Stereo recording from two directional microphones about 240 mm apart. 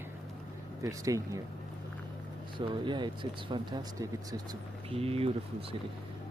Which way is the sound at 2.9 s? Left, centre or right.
Centre.